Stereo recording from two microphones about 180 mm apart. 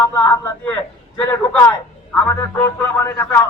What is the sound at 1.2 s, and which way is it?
Speech, 15° left (ahead or behind).